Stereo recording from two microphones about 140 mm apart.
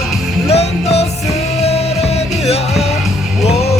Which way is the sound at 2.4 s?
50° left (ahead or behind).